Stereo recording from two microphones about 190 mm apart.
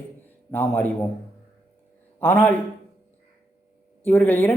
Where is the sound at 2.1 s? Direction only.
10° left (ahead or behind).